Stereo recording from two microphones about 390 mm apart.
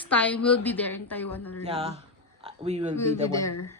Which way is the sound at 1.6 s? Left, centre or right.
Centre.